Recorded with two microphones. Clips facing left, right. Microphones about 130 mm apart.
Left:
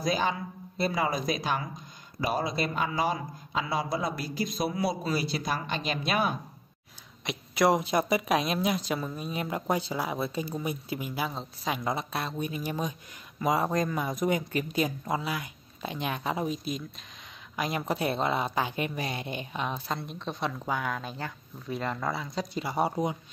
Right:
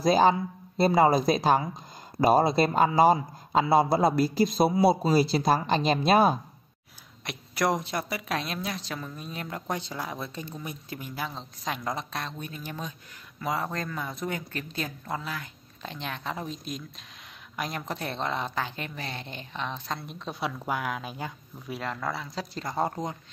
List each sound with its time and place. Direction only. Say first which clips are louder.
0.0 s a woman's voice: right 7 dB; 35° right (ahead or behind)
7.2 s speech: left 3 dB; centre (ahead or behind)
8.1 s speech: left 6 dB; 15° left (ahead or behind)
20.0 s speech: left 1 dB; centre (ahead or behind)
21.7 s speech: left 1 dB; centre (ahead or behind)